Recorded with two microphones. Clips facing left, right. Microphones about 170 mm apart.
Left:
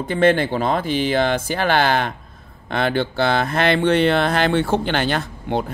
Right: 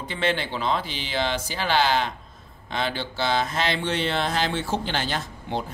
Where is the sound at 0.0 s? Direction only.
50° left (ahead or behind).